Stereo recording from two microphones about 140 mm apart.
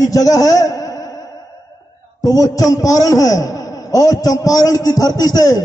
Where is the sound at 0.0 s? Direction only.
25° left (ahead or behind).